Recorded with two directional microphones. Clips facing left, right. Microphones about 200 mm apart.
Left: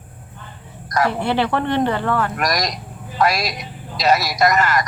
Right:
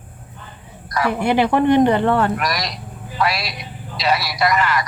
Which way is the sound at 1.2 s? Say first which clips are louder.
Right 4 dB; 15° right (ahead or behind).